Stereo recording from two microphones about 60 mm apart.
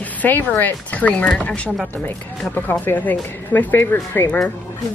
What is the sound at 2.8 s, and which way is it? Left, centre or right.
Speech, left.